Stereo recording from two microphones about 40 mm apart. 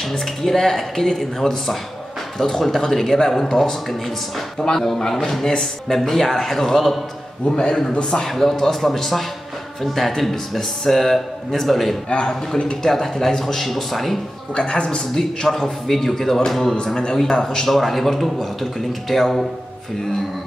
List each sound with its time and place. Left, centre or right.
0.0 s speech: centre
4.7 s speech: centre
8.2 s speech: centre
12.1 s speech: left
12.8 s speech: centre
14.5 s speech: left; by 16.7 s centre
16.7 s speech: left
17.2 s speech: centre
17.6 s speech: centre